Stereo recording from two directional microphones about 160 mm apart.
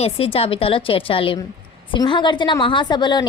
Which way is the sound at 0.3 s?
35° left (ahead or behind).